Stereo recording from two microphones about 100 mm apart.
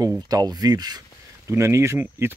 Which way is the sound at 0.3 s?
40° right (ahead or behind).